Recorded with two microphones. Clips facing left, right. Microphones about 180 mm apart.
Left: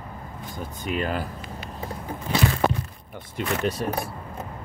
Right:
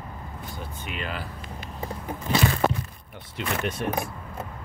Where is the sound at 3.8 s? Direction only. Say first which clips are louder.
Left 1 dB; 35° left (ahead or behind).